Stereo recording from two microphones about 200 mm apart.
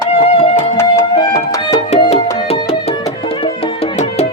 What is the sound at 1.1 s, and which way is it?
Music, 20° left (ahead or behind).